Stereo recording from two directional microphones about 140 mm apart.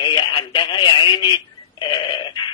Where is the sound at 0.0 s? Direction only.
35° left (ahead or behind).